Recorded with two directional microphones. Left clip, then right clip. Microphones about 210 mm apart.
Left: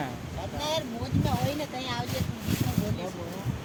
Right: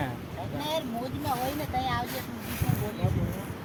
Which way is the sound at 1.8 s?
40° left (ahead or behind).